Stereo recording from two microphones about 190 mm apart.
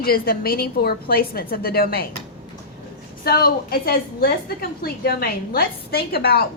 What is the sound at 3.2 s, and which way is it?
A woman's voice, 50° left (ahead or behind).